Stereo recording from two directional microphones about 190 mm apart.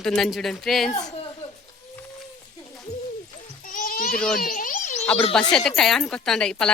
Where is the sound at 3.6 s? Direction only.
45° left (ahead or behind).